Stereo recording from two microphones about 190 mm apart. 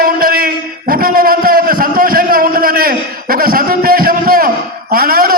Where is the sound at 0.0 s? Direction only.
50° right (ahead or behind).